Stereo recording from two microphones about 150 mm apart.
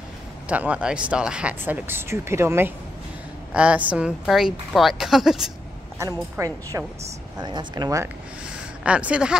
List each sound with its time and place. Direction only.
0.5 s a woman's voice: 10° right (ahead or behind)
5.9 s a woman's voice: 20° right (ahead or behind)
8.8 s speech: 10° right (ahead or behind)